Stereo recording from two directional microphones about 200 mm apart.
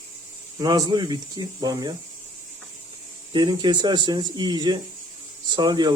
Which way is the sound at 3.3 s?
20° right (ahead or behind).